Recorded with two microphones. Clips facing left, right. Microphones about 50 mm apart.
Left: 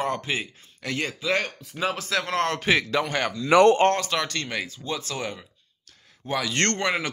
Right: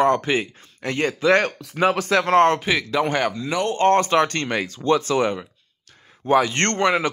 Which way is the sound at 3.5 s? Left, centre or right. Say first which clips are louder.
Left 12 dB; left.